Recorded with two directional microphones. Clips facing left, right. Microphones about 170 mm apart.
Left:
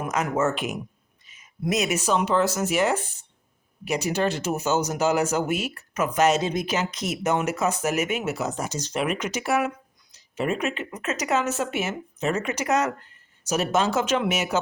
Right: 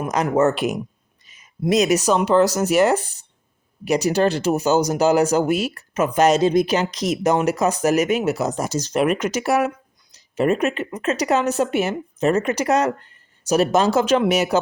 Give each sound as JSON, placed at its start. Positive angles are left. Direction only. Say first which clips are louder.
{"t": 0.0, "sound": "speech", "louder": "right 6 dB", "side_deg": -35}